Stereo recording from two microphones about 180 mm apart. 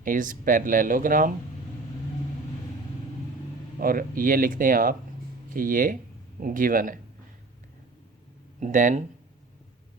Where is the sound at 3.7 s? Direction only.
50° right (ahead or behind).